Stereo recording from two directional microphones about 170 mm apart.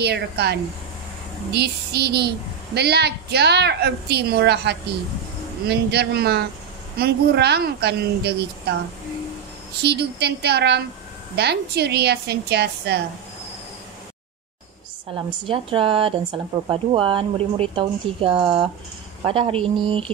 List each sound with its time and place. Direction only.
0.0 s a woman's voice: 75° right (ahead or behind)
9.8 s a woman's voice: 75° right (ahead or behind)
15.1 s speech: 30° right (ahead or behind)